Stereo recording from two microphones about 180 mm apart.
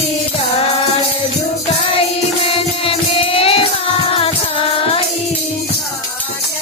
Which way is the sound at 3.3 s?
30° left (ahead or behind).